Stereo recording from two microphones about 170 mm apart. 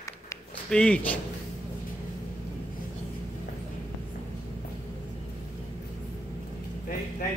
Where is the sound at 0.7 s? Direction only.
5° left (ahead or behind).